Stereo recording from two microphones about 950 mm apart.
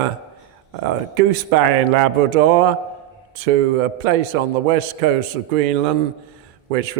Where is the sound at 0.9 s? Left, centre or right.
Right.